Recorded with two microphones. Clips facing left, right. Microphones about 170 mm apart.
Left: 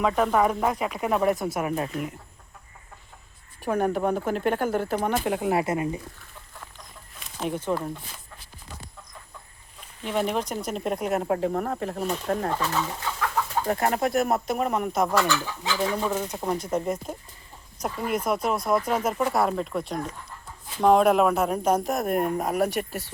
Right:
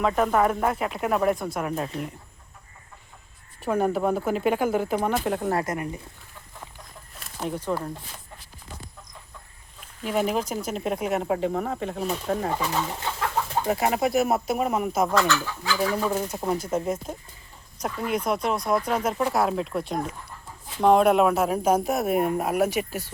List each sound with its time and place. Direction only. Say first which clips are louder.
0.0 s speech: even; centre (ahead or behind)
3.8 s speech: right 1 dB; 5° right (ahead or behind)
5.5 s speech: left 3 dB; 20° left (ahead or behind)
7.2 s a sound: left 1 dB; centre (ahead or behind)
7.4 s speech: left 1 dB; 20° left (ahead or behind)
10.0 s speech: right 1 dB; 5° right (ahead or behind)
12.6 s speech: even; 15° right (ahead or behind)
13.0 s bird: even; 25° right (ahead or behind)
13.7 s speech: right 1 dB; 5° right (ahead or behind)
15.1 s speech: right 1 dB; 10° left (ahead or behind)
16.1 s speech: right 1 dB; 5° right (ahead or behind)